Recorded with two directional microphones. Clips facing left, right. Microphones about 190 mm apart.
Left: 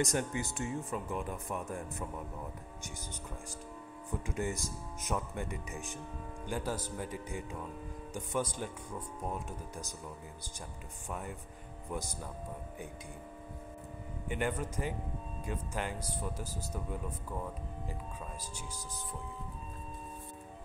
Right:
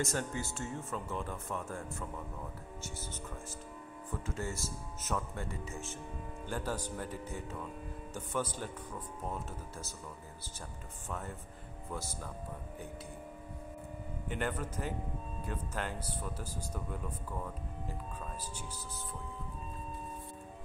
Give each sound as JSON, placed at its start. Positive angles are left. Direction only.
{"t": 0.0, "sound": "speech", "side_deg": 15}
{"t": 4.1, "sound": "speech", "side_deg": 15}
{"t": 11.1, "sound": "speech", "side_deg": 15}
{"t": 14.3, "sound": "speech", "side_deg": 10}